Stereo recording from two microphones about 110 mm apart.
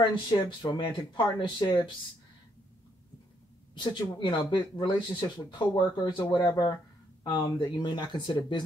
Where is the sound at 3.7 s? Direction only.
45° left (ahead or behind).